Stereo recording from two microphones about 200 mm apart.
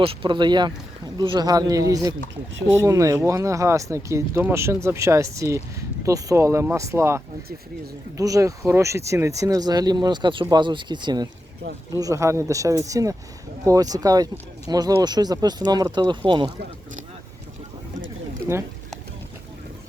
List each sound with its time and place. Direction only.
0.0 s speech: 25° right (ahead or behind)
8.2 s speech: 15° right (ahead or behind)